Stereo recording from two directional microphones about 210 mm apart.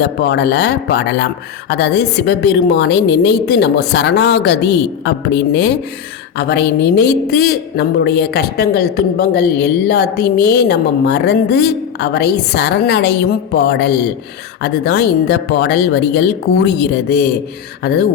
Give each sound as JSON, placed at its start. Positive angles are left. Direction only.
{"t": 0.0, "sound": "a woman's voice", "side_deg": 50}